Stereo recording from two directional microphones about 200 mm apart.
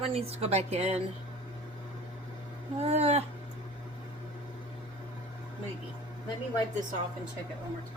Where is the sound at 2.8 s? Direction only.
30° right (ahead or behind).